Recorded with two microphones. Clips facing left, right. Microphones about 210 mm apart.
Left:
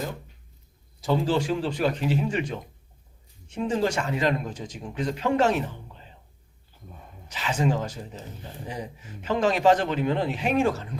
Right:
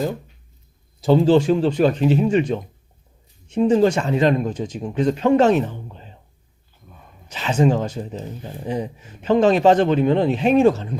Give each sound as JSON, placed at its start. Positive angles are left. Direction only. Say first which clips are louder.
{"t": 1.0, "sound": "speech", "louder": "right 9 dB", "side_deg": -25}
{"t": 7.3, "sound": "speech", "louder": "right 7 dB", "side_deg": -25}